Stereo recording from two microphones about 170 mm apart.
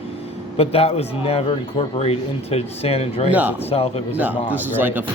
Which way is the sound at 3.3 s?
10° right (ahead or behind).